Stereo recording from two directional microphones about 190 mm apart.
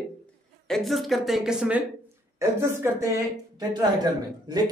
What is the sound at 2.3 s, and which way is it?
Speech, 15° right (ahead or behind).